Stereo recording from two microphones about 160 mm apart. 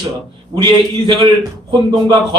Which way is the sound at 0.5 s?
30° right (ahead or behind).